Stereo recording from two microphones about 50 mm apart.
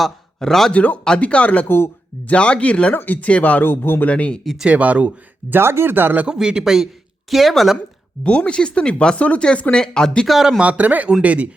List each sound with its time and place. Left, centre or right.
0.3 s speech: centre
0.7 s speech: left
1.6 s speech: left
2.2 s speech: left
2.9 s speech: left
3.6 s speech: left
4.0 s speech: left
4.6 s speech: right
5.5 s speech: right
6.2 s a man's voice: centre
7.8 s speech: left
9.7 s speech: centre
10.2 s speech: centre
10.6 s speech: right